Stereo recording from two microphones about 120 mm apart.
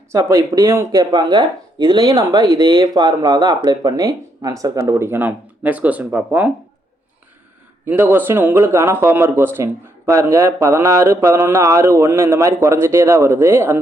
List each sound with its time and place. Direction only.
0.1 s speech: 25° right (ahead or behind)
7.9 s speech: 15° right (ahead or behind)